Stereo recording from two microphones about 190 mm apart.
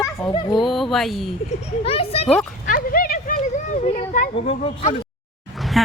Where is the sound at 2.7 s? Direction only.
50° left (ahead or behind).